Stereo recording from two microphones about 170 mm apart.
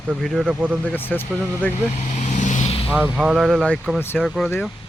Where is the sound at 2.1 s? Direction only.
45° left (ahead or behind).